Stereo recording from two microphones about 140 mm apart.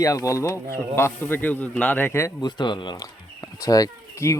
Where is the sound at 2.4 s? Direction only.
35° left (ahead or behind).